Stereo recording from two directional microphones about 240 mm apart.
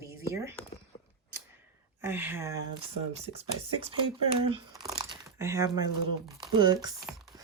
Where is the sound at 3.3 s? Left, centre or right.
Right.